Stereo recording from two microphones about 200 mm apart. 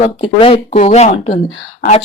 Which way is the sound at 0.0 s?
30° left (ahead or behind).